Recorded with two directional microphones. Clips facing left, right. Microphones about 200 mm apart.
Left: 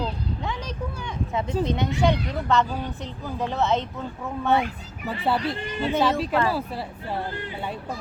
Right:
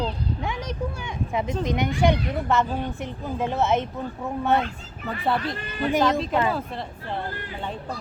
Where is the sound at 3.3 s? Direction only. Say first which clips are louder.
Right 1 dB; 20° right (ahead or behind).